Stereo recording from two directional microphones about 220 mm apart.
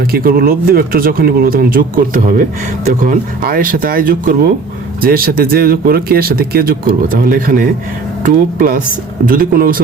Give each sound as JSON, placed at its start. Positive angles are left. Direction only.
{"t": 0.1, "sound": "speech", "side_deg": -40}